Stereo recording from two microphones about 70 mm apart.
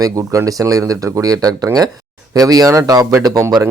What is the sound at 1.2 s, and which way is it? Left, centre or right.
Speech, right.